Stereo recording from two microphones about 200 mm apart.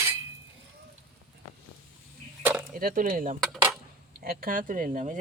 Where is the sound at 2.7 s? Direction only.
45° right (ahead or behind).